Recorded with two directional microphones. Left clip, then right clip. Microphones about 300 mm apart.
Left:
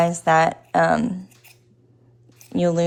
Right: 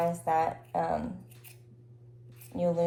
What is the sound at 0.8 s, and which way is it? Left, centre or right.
Speech, left.